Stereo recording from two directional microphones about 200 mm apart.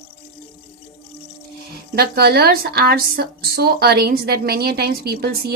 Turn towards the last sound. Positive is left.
turn(degrees=-50)  # may be behind; listen again after turning